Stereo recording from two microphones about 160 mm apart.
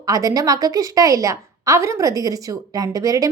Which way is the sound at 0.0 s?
20° right (ahead or behind).